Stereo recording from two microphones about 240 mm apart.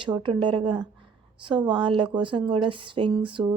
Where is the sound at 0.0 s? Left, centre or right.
Centre.